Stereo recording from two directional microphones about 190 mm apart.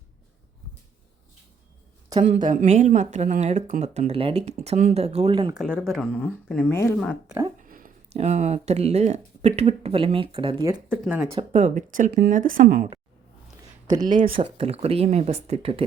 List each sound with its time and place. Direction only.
2.4 s speech: 45° right (ahead or behind); by 5.5 s 25° right (ahead or behind)
5.5 s speech: 5° left (ahead or behind)
6.9 s speech: centre (ahead or behind)
7.6 s a sound: 45° right (ahead or behind)
8.1 s speech: 35° right (ahead or behind)
10.9 s speech: 5° right (ahead or behind)
11.5 s speech: 40° right (ahead or behind)
14.0 s speech: 45° right (ahead or behind)
14.3 s speech: 30° right (ahead or behind)